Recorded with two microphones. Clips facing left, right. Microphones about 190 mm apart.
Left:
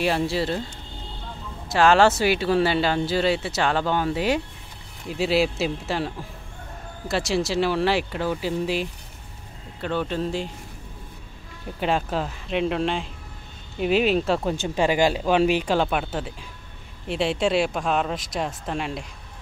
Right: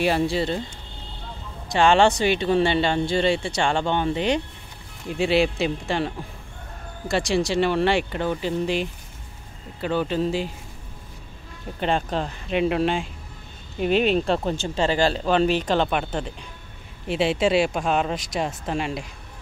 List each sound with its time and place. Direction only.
0.0 s speech: centre (ahead or behind)
1.7 s speech: centre (ahead or behind)
11.8 s speech: 5° left (ahead or behind)